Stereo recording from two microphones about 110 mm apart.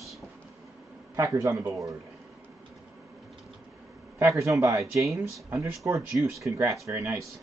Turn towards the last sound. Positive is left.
turn(degrees=-25)  # may be behind; listen again after turning